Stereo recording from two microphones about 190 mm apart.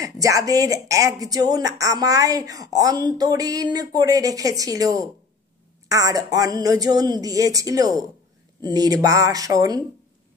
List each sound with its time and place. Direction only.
0.0 s speech: 15° right (ahead or behind)